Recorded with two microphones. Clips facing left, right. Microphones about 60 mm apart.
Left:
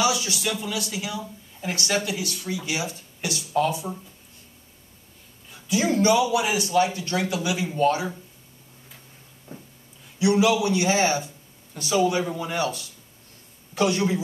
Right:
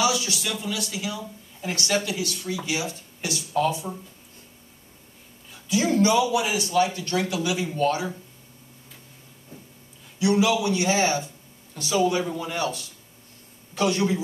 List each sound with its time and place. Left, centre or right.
0.0 s a sound: left
0.5 s speech: centre
5.7 s speech: left
9.5 s a sound: left
10.4 s speech: left
13.9 s a man's voice: centre